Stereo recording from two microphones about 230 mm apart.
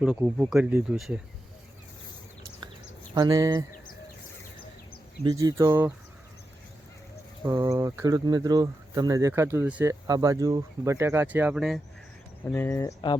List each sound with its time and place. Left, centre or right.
0.0 s speech: centre
3.2 s speech: centre
5.2 s speech: centre
7.4 s speech: centre
12.7 s speech: centre